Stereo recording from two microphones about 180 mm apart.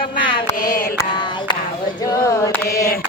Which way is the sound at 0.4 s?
20° left (ahead or behind).